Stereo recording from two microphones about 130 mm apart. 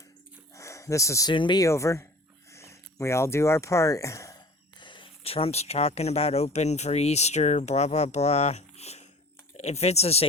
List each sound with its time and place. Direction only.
0.5 s a sound: 25° left (ahead or behind)
1.3 s speech: 35° left (ahead or behind)
1.6 s speech: 25° left (ahead or behind); by 10.2 s 55° left (ahead or behind)